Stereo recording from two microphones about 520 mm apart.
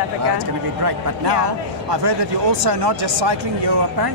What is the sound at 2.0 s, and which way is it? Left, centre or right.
Speech, right.